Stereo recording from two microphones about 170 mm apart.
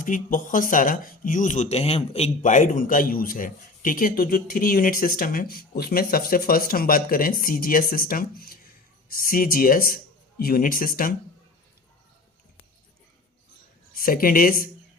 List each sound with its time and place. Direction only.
0.0 s speech: 50° left (ahead or behind)
13.9 s speech: 60° left (ahead or behind)